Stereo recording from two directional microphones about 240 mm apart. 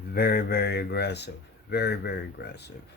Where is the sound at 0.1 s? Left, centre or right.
Left.